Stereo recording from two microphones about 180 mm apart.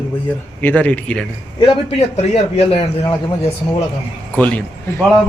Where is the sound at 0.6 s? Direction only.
10° left (ahead or behind).